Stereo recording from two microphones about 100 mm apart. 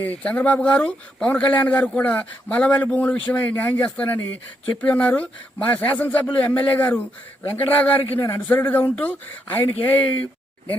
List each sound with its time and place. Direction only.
0.0 s a man's voice: 15° left (ahead or behind)